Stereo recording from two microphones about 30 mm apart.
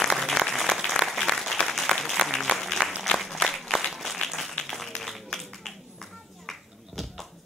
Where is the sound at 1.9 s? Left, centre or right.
Centre.